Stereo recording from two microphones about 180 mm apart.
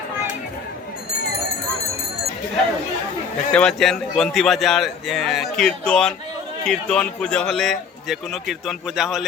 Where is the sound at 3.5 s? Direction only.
5° left (ahead or behind).